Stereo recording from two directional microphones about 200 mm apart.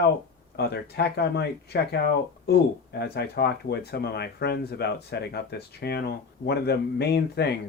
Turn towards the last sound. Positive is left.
turn(degrees=55)  # may be behind; listen again after turning